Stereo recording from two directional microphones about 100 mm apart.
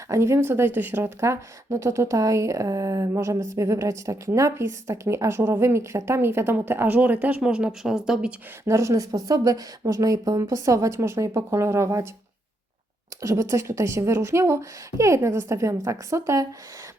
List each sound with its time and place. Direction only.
0.1 s speech: 30° right (ahead or behind); by 8.3 s 5° right (ahead or behind)
8.6 s speech: 30° right (ahead or behind)
13.2 s speech: 30° right (ahead or behind)